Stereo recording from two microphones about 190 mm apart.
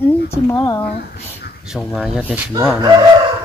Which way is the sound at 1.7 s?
5° right (ahead or behind).